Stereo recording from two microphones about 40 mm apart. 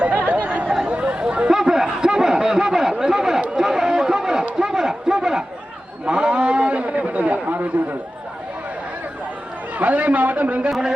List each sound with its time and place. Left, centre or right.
0.0 s chatter: right
0.7 s chatter: right
1.5 s chatter: centre
2.0 s a sound: centre
3.0 s chatter: centre
3.6 s a sound: centre; by 7.9 s right
9.7 s a man's voice: right
10.7 s a man's voice: right